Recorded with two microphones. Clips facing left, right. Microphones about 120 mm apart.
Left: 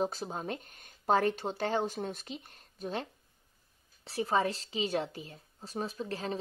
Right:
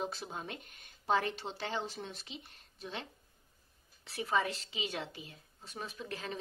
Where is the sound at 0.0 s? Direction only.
40° left (ahead or behind).